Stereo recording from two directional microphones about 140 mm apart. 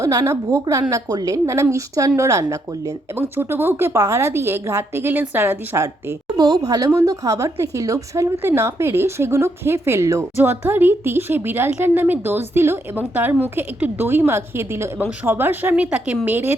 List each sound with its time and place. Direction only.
0.0 s a woman's voice: 25° right (ahead or behind)